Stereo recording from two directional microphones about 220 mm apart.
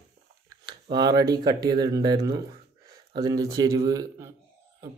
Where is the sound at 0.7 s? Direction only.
20° right (ahead or behind).